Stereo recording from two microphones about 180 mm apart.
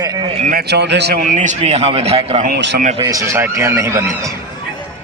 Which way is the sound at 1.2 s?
45° right (ahead or behind).